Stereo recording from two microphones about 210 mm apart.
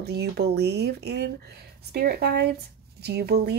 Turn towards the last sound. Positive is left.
turn(degrees=-50)  # may be behind; listen again after turning